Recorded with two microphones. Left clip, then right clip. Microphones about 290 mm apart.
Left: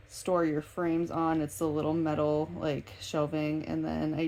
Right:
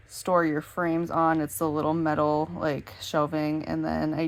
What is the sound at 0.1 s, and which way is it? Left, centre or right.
Speech, right.